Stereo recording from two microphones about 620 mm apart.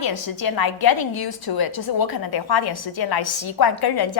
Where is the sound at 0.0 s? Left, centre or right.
Left.